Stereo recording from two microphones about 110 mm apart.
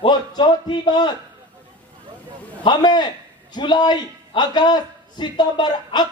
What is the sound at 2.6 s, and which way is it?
A man's voice, 40° left (ahead or behind).